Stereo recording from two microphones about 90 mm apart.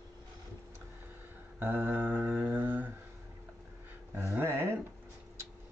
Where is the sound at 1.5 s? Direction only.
25° right (ahead or behind).